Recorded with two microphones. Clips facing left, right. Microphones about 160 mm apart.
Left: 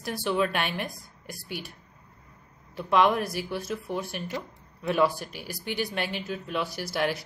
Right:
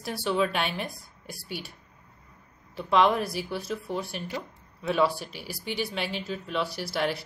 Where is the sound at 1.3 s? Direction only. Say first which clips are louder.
Even; 45° left (ahead or behind).